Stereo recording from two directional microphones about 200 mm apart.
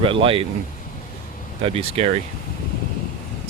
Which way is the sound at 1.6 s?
30° right (ahead or behind).